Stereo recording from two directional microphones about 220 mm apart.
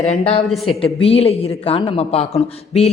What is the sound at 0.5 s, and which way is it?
Speech, centre (ahead or behind).